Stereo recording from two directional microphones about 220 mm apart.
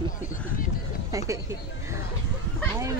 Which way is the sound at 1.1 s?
15° right (ahead or behind).